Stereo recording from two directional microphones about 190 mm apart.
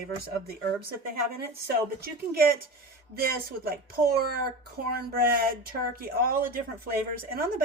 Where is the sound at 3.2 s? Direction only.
50° right (ahead or behind).